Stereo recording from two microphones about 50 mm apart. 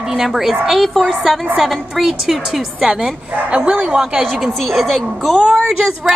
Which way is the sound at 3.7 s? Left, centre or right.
Right.